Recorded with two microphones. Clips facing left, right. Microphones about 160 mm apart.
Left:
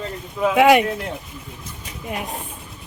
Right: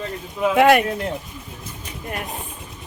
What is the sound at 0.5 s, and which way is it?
Speech, 10° left (ahead or behind).